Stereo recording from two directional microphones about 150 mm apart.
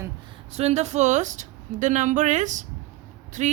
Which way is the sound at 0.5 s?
45° right (ahead or behind).